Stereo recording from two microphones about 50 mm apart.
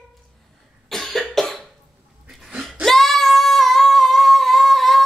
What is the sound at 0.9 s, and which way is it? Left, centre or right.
Cough, centre.